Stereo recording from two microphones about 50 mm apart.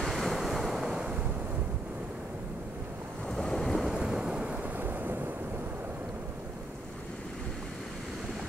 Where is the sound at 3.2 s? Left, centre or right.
Centre.